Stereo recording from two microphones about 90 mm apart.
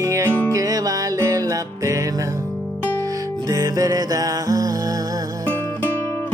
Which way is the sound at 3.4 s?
40° right (ahead or behind).